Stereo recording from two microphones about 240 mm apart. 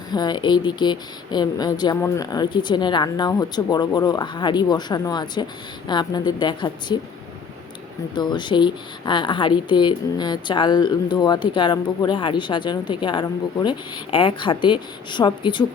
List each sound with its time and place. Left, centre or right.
0.1 s a woman's voice: centre
8.1 s a woman's voice: centre